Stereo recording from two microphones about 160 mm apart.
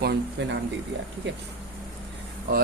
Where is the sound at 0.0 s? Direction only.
90° right.